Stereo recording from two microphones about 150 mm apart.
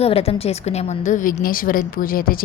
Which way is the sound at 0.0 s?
40° left (ahead or behind).